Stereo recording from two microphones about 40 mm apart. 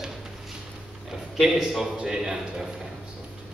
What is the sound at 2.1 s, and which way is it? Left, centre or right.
Speech, centre.